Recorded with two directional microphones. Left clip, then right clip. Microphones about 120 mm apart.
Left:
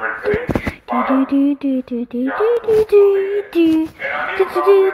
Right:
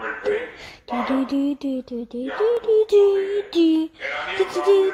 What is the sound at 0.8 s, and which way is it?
Speech, 45° right (ahead or behind).